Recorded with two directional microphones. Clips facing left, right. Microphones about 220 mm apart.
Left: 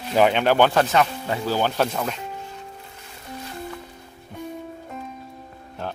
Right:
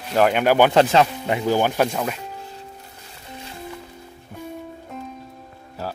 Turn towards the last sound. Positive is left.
turn(degrees=-5)  # may be behind; listen again after turning